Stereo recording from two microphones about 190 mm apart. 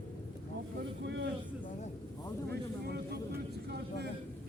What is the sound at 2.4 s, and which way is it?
Vehicle, 60° right (ahead or behind).